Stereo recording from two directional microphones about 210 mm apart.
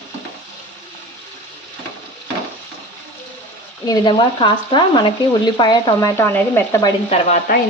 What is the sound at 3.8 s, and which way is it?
Speech, 20° left (ahead or behind).